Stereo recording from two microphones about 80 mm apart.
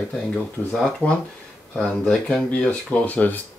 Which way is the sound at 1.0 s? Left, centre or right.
Centre.